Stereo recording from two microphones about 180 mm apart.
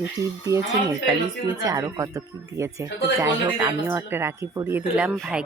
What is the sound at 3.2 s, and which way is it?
A woman's voice, 10° right (ahead or behind).